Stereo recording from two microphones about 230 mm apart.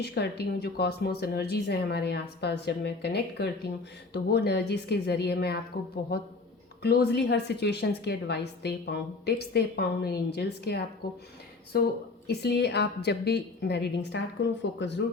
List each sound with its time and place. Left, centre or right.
0.0 s a woman's voice: left